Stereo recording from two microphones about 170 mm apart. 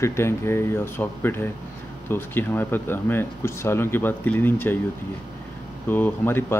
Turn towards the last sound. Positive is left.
turn(degrees=10)  # may be behind; listen again after turning